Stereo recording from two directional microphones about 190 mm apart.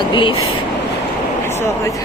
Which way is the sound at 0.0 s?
25° left (ahead or behind).